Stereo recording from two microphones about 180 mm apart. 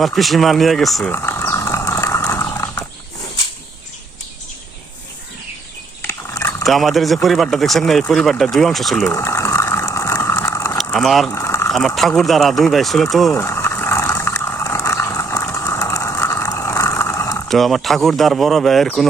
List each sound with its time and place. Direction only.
0.0 s speech: centre (ahead or behind)
1.1 s a sound: 15° left (ahead or behind)
6.1 s dog: 15° left (ahead or behind)
6.6 s speech: centre (ahead or behind)
9.0 s vehicle: 15° left (ahead or behind)
10.9 s speech: centre (ahead or behind)
11.3 s a sound: 15° left (ahead or behind)
11.7 s speech: centre (ahead or behind)
13.3 s vehicle: 15° left (ahead or behind)
17.5 s speech: centre (ahead or behind)